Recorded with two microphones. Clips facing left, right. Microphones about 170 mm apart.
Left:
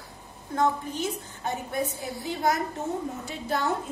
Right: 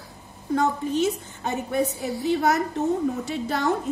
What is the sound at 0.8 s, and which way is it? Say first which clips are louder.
Speech: right 8 dB; 75° right (ahead or behind).